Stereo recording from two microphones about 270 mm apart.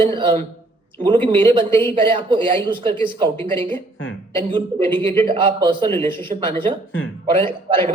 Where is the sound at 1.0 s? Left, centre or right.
Centre.